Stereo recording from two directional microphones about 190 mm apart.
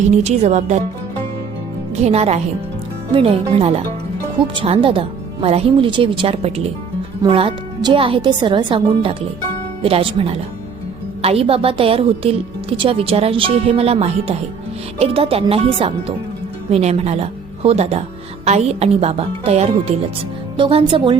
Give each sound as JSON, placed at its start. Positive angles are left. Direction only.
{"t": 0.1, "sound": "a woman's voice", "side_deg": -35}
{"t": 2.0, "sound": "a woman's voice", "side_deg": -35}